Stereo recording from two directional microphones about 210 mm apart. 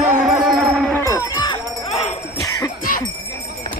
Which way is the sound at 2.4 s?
15° left (ahead or behind).